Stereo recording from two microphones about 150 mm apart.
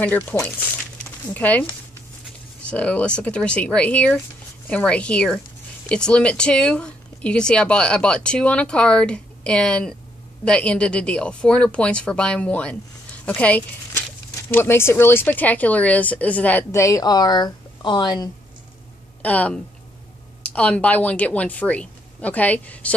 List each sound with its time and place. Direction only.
0.0 s speech: 10° left (ahead or behind); by 18.3 s 30° left (ahead or behind)
19.2 s speech: 10° left (ahead or behind)